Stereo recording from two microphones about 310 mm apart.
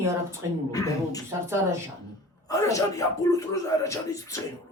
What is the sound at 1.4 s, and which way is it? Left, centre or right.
Speech, centre.